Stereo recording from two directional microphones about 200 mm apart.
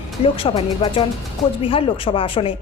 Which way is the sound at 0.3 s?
25° left (ahead or behind).